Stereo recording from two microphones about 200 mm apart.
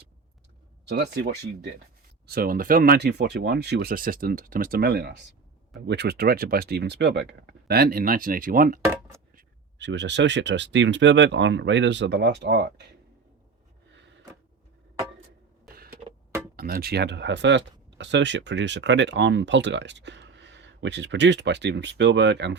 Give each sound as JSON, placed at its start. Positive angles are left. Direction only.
{"t": 0.9, "sound": "speech", "side_deg": -60}
{"t": 9.7, "sound": "speech", "side_deg": -60}
{"t": 15.6, "sound": "a sound", "side_deg": -50}
{"t": 16.6, "sound": "speech", "side_deg": -50}